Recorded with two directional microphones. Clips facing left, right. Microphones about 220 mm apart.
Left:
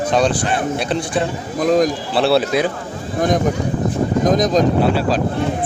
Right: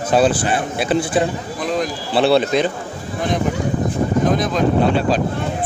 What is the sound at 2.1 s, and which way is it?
Speech, centre (ahead or behind).